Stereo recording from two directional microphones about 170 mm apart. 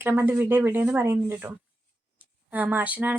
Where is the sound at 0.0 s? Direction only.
15° right (ahead or behind).